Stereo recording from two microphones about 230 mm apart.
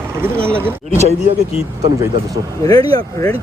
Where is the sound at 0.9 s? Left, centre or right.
Right.